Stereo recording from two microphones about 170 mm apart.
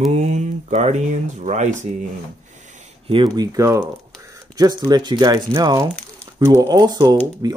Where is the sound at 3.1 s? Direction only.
25° right (ahead or behind).